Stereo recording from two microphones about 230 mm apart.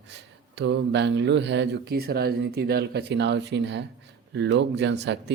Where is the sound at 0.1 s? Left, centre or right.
Right.